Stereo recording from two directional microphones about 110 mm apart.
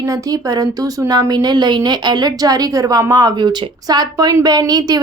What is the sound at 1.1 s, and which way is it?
A woman's voice, 40° right (ahead or behind).